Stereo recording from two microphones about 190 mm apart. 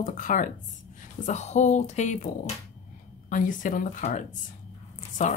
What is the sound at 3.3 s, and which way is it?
Speech, 45° left (ahead or behind).